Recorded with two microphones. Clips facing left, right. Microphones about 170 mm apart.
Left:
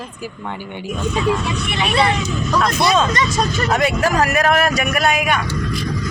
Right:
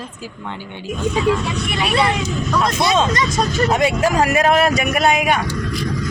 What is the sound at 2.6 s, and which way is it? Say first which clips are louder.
Speech: left 1 dB; 25° right (ahead or behind).